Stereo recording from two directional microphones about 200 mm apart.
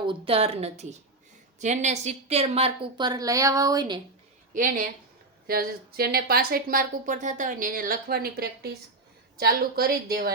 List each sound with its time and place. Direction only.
0.0 s a woman's voice: 25° right (ahead or behind)
4.5 s speech: 40° right (ahead or behind)